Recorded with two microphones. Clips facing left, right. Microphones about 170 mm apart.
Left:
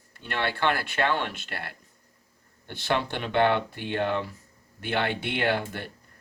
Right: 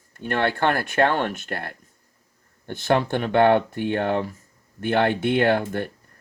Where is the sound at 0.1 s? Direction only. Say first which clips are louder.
Right 7 dB; 50° right (ahead or behind).